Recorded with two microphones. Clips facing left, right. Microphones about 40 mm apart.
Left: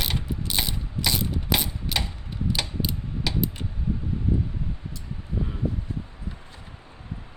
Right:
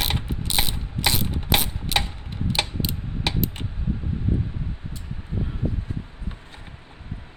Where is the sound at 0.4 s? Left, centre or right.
Right.